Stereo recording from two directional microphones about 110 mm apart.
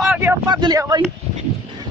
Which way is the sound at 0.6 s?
35° right (ahead or behind).